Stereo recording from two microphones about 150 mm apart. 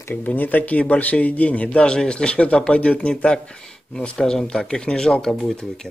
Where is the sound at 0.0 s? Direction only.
10° left (ahead or behind).